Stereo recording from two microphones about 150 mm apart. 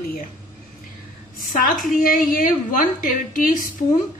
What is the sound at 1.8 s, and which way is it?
A woman's voice, 70° left (ahead or behind).